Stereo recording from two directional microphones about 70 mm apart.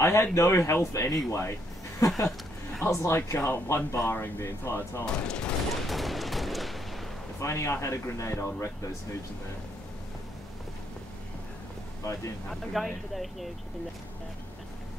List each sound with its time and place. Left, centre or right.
0.0 s speech: left
2.9 s speech: left
5.0 s speech: centre
5.9 s fusillade: centre
7.3 s speech: left
12.4 s speech: centre